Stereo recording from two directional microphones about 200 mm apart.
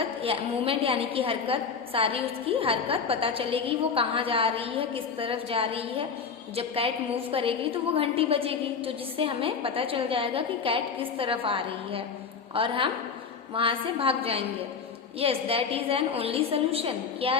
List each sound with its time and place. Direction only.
0.2 s a woman's voice: 30° right (ahead or behind)